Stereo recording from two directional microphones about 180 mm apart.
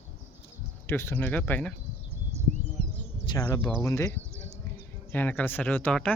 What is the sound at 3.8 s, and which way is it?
Speech, 15° left (ahead or behind).